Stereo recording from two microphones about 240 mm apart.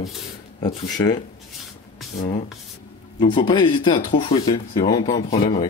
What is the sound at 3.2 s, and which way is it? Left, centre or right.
Speech, centre.